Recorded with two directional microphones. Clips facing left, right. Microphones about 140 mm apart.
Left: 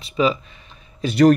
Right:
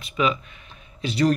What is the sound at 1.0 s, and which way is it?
Speech, 60° left (ahead or behind).